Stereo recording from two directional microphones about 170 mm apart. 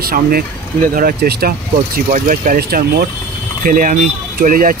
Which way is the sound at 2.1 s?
55° right (ahead or behind).